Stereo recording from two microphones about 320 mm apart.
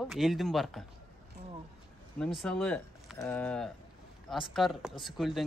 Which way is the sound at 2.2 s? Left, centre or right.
Centre.